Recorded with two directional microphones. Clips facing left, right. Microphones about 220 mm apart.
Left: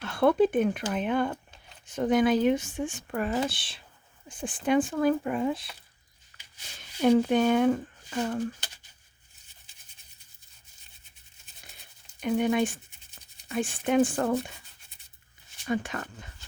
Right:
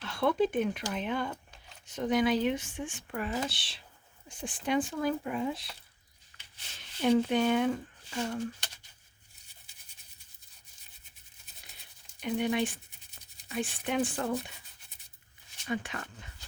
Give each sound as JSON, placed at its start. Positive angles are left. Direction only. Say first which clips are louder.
{"t": 0.0, "sound": "speech", "louder": "left 6 dB", "side_deg": 50}
{"t": 7.0, "sound": "speech", "louder": "left 4 dB", "side_deg": 45}
{"t": 12.2, "sound": "speech", "louder": "left 5 dB", "side_deg": 45}
{"t": 15.6, "sound": "speech", "louder": "left 5 dB", "side_deg": 45}